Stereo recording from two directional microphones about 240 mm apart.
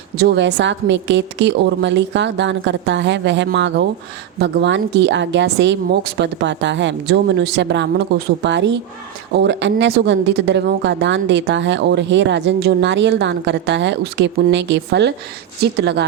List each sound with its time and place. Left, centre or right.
0.2 s a woman's voice: right